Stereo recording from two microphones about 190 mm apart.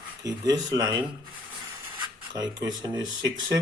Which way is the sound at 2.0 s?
20° right (ahead or behind).